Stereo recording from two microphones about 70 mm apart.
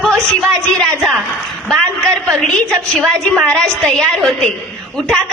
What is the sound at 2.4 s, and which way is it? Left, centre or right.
A woman's voice, centre.